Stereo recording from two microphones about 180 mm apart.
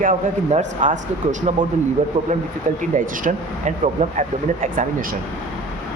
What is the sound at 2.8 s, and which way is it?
Speech, 45° right (ahead or behind).